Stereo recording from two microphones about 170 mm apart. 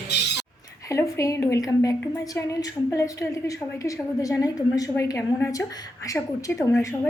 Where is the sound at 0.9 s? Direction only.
15° left (ahead or behind).